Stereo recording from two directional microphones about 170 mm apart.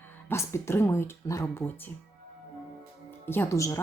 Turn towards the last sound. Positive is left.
turn(degrees=15)  # may be behind; listen again after turning